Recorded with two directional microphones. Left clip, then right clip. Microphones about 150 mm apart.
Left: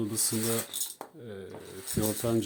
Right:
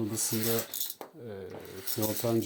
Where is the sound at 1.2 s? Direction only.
30° left (ahead or behind).